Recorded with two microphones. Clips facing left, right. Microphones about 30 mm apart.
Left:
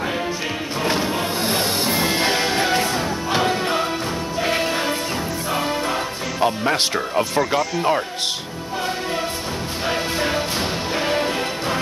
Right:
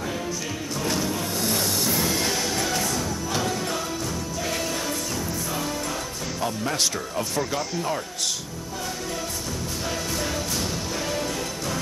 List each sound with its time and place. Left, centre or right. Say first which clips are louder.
0.8 s music: left 5 dB; left
6.4 s speech: left 7 dB; left
9.8 s music: left 8 dB; left